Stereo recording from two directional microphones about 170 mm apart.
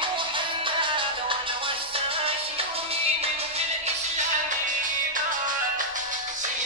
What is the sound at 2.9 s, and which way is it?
Music, 35° right (ahead or behind).